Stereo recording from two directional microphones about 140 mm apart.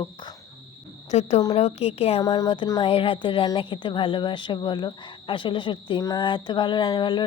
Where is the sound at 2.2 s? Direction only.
25° left (ahead or behind).